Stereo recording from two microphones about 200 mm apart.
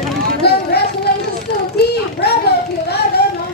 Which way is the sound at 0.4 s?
55° left (ahead or behind).